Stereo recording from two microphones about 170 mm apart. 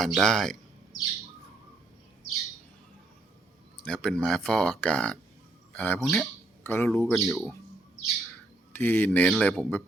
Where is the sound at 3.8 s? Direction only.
5° left (ahead or behind).